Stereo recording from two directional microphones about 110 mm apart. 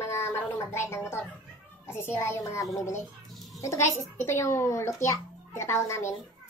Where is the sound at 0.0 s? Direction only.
25° left (ahead or behind).